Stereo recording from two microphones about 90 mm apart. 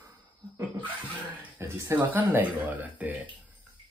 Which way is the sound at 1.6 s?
30° right (ahead or behind).